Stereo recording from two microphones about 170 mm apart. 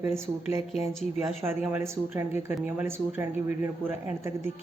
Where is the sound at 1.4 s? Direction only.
15° right (ahead or behind).